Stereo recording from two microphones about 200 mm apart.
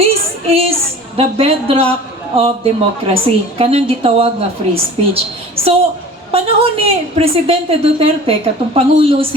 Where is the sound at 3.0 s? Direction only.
30° right (ahead or behind).